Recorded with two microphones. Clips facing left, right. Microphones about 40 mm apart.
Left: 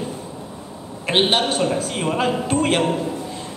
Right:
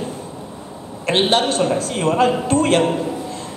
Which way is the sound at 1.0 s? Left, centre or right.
Centre.